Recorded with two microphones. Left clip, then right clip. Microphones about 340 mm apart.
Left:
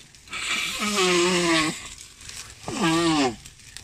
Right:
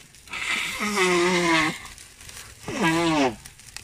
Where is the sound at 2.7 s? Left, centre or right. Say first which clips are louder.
Even; centre.